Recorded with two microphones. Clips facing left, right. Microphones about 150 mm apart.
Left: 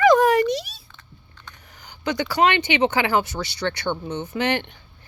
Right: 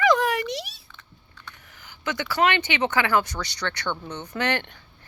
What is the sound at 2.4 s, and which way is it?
Speech, 30° left (ahead or behind).